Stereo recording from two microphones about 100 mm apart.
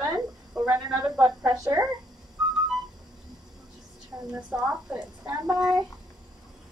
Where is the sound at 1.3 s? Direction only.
40° right (ahead or behind).